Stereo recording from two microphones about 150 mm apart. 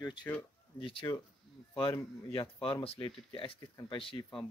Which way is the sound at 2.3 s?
40° left (ahead or behind).